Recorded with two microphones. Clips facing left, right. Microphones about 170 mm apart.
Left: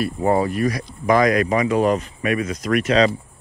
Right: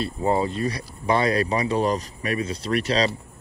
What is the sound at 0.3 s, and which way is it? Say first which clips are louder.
Speech: left 4 dB; 25° right (ahead or behind).